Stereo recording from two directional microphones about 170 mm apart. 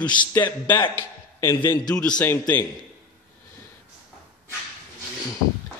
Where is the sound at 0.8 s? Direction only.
25° left (ahead or behind).